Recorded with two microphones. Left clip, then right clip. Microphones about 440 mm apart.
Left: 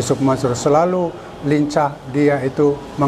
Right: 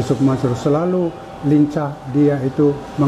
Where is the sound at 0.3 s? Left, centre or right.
Left.